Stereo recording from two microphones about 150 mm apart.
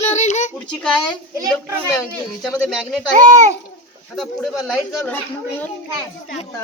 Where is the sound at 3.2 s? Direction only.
25° right (ahead or behind).